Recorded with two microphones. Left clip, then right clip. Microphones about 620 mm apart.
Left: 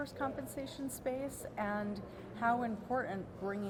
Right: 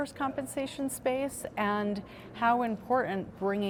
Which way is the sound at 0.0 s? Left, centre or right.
Right.